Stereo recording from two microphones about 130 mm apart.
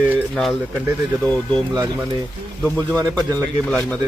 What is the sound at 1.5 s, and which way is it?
Speech, 30° right (ahead or behind).